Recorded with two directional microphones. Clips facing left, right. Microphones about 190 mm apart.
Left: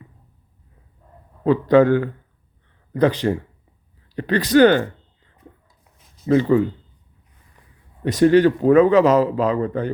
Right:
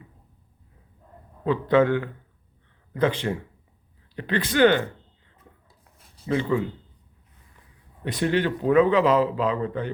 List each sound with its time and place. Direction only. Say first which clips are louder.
1.5 s speech: left 6 dB; 40° left (ahead or behind)
6.2 s speech: left 8 dB; 40° left (ahead or behind)
8.0 s speech: left 10 dB; 40° left (ahead or behind)